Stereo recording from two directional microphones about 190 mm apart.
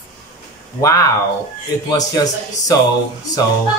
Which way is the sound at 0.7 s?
15° left (ahead or behind).